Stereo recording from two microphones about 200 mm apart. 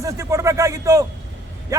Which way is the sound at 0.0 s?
15° right (ahead or behind).